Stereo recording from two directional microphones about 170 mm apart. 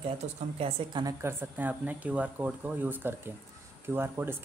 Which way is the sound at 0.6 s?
30° right (ahead or behind).